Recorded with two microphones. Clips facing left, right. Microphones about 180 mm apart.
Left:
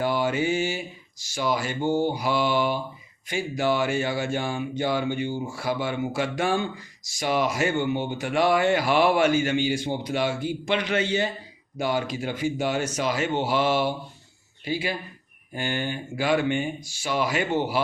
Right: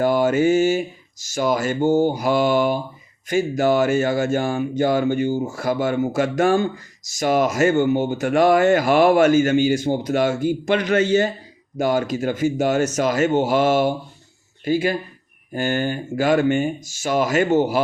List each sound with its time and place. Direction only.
0.0 s speech: 45° right (ahead or behind)